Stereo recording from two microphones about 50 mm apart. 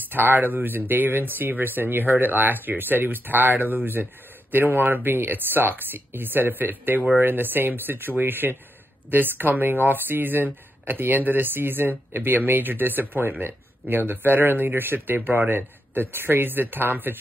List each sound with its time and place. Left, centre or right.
0.1 s speech: right